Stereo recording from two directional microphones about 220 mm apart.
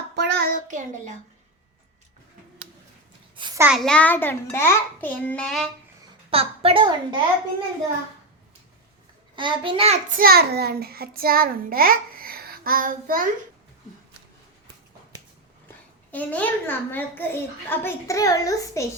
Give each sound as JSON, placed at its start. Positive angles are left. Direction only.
{"t": 0.2, "sound": "child singing", "side_deg": -40}
{"t": 3.3, "sound": "a sound", "side_deg": -20}
{"t": 3.6, "sound": "a child's voice", "side_deg": 0}
{"t": 6.3, "sound": "a woman's voice", "side_deg": -25}
{"t": 9.3, "sound": "a woman's voice", "side_deg": -20}
{"t": 10.2, "sound": "a child's voice", "side_deg": -45}
{"t": 16.1, "sound": "a child's voice", "side_deg": 5}